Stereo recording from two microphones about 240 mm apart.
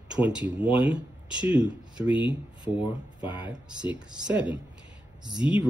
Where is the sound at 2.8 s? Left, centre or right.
Centre.